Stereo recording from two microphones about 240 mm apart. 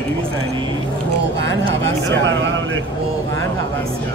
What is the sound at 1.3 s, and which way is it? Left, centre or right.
A man's voice, right.